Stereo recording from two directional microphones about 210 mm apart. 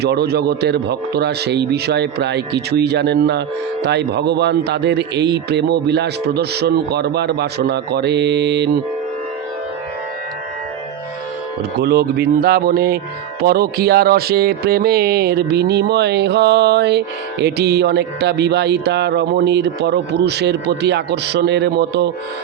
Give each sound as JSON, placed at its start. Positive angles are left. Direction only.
{"t": 0.0, "sound": "a man's voice", "side_deg": -50}
{"t": 11.8, "sound": "a man's voice", "side_deg": -50}